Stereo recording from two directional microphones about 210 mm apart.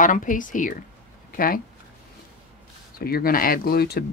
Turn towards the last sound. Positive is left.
turn(degrees=45)  # may be behind; listen again after turning